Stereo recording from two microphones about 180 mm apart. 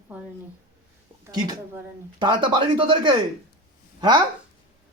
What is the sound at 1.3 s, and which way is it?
Speech, 20° right (ahead or behind).